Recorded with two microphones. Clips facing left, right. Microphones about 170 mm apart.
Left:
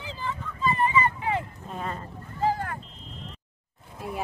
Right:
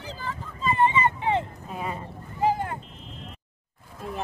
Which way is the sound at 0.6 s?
25° right (ahead or behind).